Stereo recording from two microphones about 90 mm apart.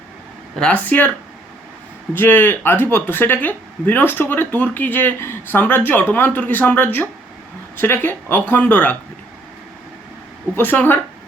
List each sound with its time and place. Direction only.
0.5 s speech: 15° left (ahead or behind)
2.1 s speech: 25° left (ahead or behind)
10.5 s speech: 20° left (ahead or behind)